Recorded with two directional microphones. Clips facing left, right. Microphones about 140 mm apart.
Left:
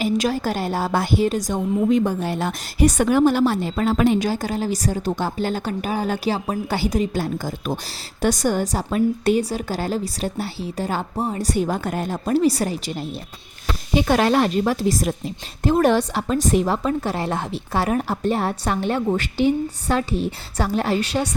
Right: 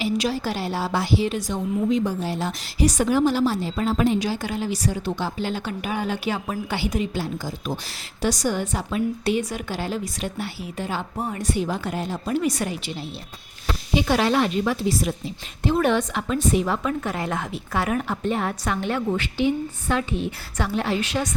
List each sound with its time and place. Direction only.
0.0 s a woman's voice: 45° left (ahead or behind); by 4.2 s 70° left (ahead or behind)
4.2 s a woman's voice: 45° left (ahead or behind)
12.4 s a woman's voice: 35° left (ahead or behind)
19.1 s a woman's voice: 45° left (ahead or behind)